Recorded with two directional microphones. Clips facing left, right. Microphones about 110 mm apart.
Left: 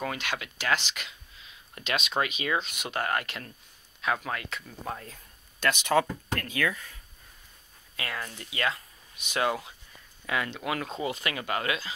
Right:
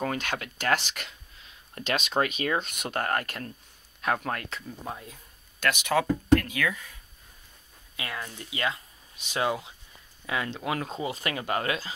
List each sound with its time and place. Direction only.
0.0 s speech: 40° right (ahead or behind)
4.8 s speech: 15° right (ahead or behind)
5.6 s speech: 5° right (ahead or behind)
7.9 s speech: 20° right (ahead or behind)